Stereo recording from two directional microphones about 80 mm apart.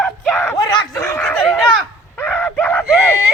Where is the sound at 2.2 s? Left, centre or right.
Left.